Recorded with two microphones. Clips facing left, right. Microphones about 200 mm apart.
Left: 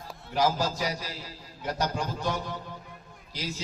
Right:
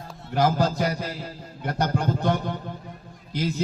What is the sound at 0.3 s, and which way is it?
A man's voice, 60° right (ahead or behind).